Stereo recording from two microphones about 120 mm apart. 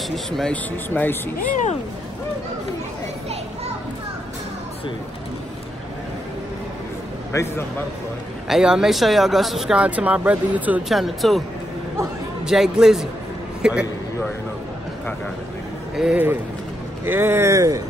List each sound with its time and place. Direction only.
0.1 s speech: 5° left (ahead or behind)
0.8 s speech: 15° left (ahead or behind)
7.3 s a man's voice: 25° left (ahead or behind)
8.5 s speech: 5° right (ahead or behind)
10.9 s speech: centre (ahead or behind)
12.4 s speech: 5° right (ahead or behind)
16.0 s speech: 10° right (ahead or behind); by 17.8 s 30° right (ahead or behind)